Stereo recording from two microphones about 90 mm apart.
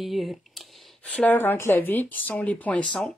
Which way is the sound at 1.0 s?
15° left (ahead or behind).